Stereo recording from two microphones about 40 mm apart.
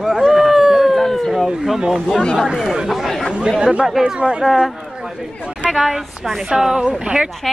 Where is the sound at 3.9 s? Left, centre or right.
Centre.